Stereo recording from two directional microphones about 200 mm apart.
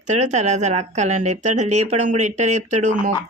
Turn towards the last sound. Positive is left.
turn(degrees=-40)  # may be behind; listen again after turning